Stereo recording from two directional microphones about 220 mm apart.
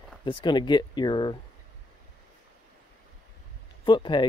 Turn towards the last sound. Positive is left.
turn(degrees=20)  # may be behind; listen again after turning